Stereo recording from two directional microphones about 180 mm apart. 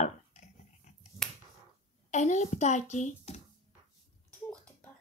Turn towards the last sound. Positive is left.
turn(degrees=40)  # may be behind; listen again after turning